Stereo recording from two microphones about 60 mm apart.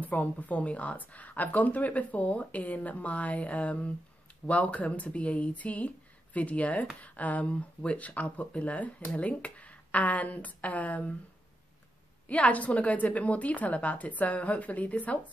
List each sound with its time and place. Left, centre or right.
0.0 s speech: left
12.3 s speech: left